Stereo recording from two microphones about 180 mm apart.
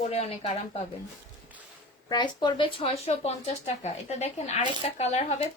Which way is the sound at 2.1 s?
25° left (ahead or behind).